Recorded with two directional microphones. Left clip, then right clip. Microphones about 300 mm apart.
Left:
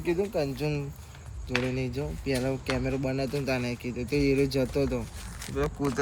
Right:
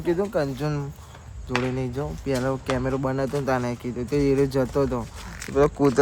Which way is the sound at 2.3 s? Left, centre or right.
Right.